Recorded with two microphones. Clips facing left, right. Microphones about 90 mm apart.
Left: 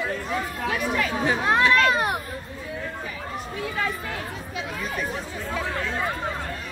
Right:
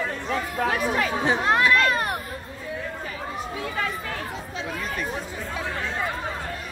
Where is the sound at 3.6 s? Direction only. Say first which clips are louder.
Left 2 dB; centre (ahead or behind).